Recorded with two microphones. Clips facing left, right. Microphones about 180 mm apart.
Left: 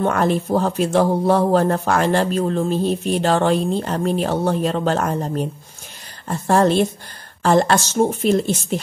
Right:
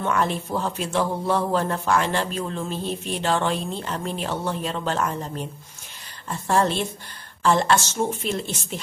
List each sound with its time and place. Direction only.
0.0 s a man's voice: 45° left (ahead or behind)